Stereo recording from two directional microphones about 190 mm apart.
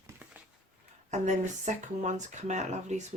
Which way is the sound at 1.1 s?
40° right (ahead or behind).